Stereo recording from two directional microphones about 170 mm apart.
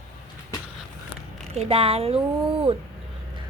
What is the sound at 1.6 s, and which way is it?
Speech, 35° right (ahead or behind).